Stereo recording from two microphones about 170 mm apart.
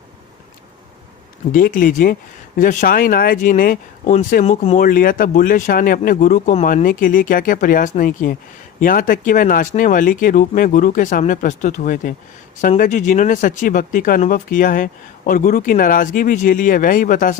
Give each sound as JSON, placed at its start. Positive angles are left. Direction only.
{"t": 1.5, "sound": "speech", "side_deg": 55}